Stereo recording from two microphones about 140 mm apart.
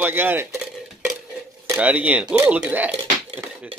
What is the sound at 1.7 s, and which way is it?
Speech, 10° right (ahead or behind).